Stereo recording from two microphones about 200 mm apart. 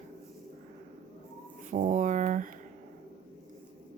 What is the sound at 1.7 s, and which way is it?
Speech, 40° right (ahead or behind).